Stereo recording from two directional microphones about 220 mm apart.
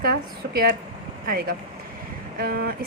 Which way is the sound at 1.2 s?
40° right (ahead or behind).